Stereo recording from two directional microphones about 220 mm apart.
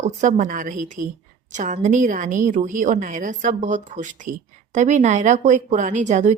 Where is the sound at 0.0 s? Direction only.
35° right (ahead or behind).